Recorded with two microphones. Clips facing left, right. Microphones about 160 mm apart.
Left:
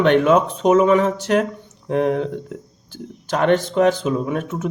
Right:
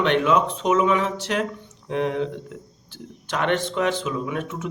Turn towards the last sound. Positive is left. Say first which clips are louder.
# left 5 dB
turn(degrees=40)  # may be behind; listen again after turning